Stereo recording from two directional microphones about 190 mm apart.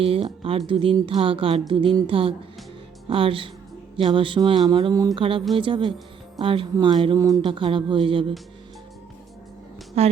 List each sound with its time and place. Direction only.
0.0 s speech: 30° right (ahead or behind)
10.0 s a woman's voice: 35° right (ahead or behind)